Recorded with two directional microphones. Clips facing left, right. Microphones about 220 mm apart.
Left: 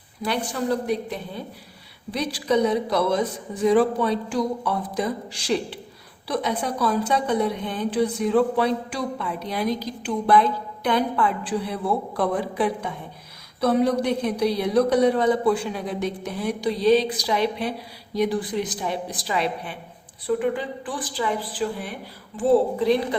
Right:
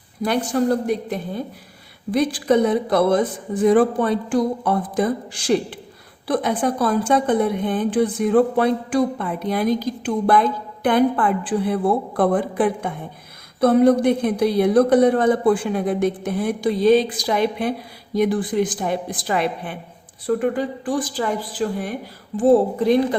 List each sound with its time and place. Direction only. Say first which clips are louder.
0.3 s a woman's voice: right 5 dB; 45° right (ahead or behind)